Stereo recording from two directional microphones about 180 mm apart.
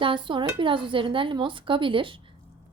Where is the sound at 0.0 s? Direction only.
25° right (ahead or behind).